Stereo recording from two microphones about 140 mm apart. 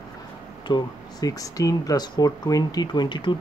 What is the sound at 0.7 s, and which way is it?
Speech, 25° left (ahead or behind).